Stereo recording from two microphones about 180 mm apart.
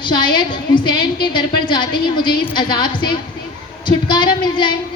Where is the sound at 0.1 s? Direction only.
25° left (ahead or behind).